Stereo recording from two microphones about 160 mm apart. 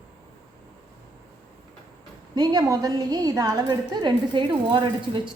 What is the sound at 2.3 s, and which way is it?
A woman's voice, 25° right (ahead or behind).